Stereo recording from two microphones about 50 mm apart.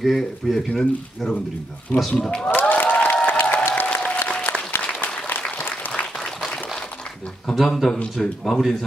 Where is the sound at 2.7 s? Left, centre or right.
Left.